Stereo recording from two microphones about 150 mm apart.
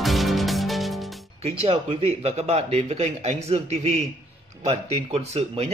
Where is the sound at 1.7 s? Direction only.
40° right (ahead or behind).